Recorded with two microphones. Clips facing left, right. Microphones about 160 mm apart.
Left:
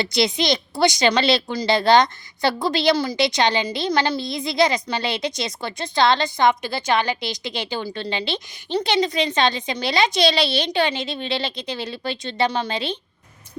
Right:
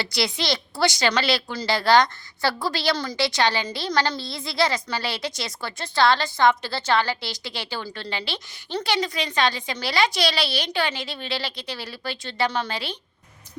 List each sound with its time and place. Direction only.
0.0 s a woman's voice: 20° left (ahead or behind)